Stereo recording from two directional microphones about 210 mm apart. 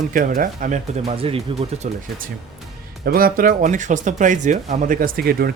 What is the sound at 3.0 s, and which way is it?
Speech, 45° right (ahead or behind).